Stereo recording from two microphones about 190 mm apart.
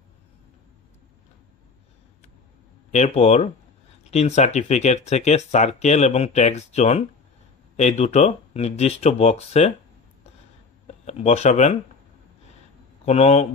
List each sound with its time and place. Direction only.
2.9 s speech: 35° left (ahead or behind)
10.9 s speech: 35° left (ahead or behind)
13.0 s speech: 30° left (ahead or behind)